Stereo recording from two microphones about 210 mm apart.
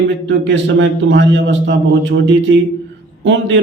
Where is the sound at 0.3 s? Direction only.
60° right (ahead or behind).